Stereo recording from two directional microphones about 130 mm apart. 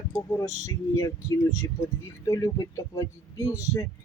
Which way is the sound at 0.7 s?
25° left (ahead or behind).